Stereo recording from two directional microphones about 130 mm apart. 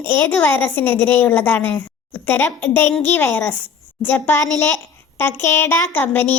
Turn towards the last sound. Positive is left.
turn(degrees=15)  # may be behind; listen again after turning